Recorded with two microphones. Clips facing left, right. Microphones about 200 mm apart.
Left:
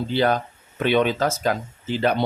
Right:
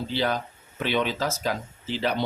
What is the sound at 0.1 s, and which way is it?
Speech, 55° left (ahead or behind).